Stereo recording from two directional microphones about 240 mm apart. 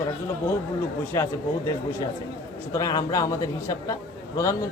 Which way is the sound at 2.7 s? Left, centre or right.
Centre.